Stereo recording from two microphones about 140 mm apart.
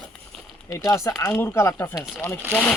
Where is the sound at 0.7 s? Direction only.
25° left (ahead or behind).